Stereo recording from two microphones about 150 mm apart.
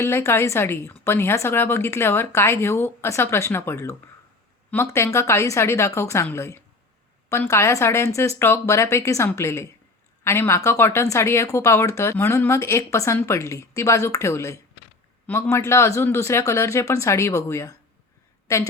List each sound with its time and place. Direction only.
0.0 s a woman's voice: 20° left (ahead or behind)